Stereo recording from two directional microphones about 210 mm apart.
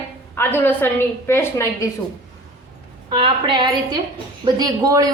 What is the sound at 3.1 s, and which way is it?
A woman's voice, 25° right (ahead or behind).